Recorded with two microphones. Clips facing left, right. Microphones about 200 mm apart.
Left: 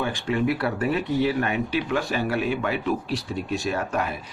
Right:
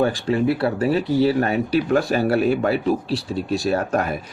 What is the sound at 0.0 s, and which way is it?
Speech, 35° right (ahead or behind).